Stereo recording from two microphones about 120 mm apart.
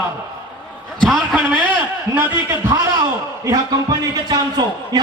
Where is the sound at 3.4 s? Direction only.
35° right (ahead or behind).